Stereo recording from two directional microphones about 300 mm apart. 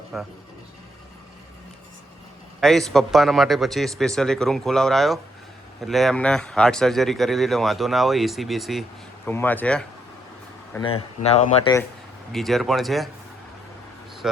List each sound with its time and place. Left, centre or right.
0.1 s speech: centre
2.6 s speech: centre; by 11.7 s left
12.3 s speech: centre